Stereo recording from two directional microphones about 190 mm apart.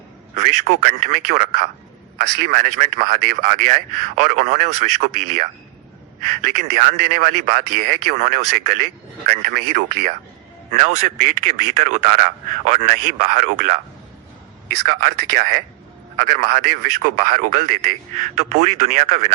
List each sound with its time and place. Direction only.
0.3 s a man's voice: 40° right (ahead or behind)
6.6 s a man's voice: 40° right (ahead or behind)
14.8 s a man's voice: 50° right (ahead or behind)